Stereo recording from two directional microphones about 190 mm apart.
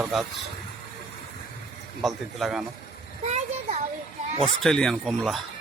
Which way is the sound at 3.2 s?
35° right (ahead or behind).